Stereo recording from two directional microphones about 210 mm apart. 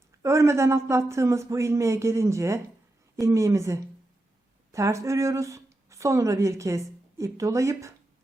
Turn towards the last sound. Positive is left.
turn(degrees=-15)  # may be behind; listen again after turning